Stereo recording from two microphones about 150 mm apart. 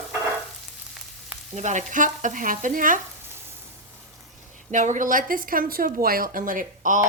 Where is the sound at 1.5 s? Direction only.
55° right (ahead or behind).